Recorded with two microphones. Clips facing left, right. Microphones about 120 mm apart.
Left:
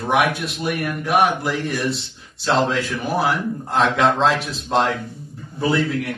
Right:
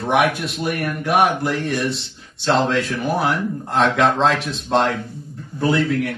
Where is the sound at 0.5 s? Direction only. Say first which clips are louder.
Right 1 dB; centre (ahead or behind).